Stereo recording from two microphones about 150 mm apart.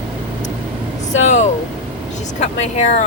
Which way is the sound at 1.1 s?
50° left (ahead or behind).